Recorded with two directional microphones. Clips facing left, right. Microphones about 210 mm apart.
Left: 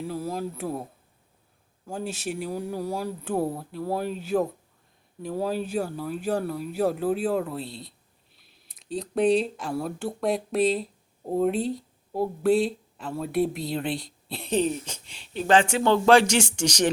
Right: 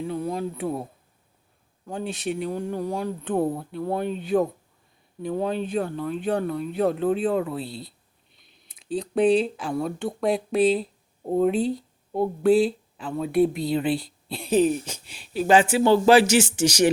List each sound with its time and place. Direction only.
0.0 s speech: centre (ahead or behind)
1.9 s speech: 5° left (ahead or behind)